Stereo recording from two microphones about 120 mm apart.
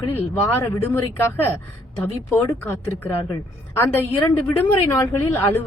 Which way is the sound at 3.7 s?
20° left (ahead or behind).